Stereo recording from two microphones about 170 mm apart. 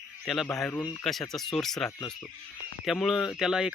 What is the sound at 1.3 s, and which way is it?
Speech, centre (ahead or behind).